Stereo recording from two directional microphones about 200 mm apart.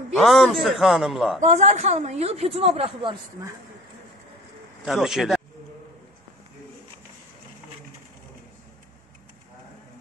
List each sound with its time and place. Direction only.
0.1 s a man's voice: centre (ahead or behind)
1.4 s a woman's voice: 35° right (ahead or behind)
4.8 s a man's voice: centre (ahead or behind)